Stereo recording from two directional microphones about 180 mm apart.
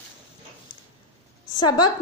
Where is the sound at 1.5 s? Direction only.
25° left (ahead or behind).